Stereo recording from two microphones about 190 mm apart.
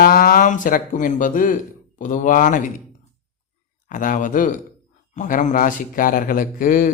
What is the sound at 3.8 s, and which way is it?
A man's voice, 45° left (ahead or behind).